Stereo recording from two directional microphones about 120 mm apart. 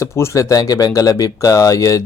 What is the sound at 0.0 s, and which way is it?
Speech, 25° left (ahead or behind).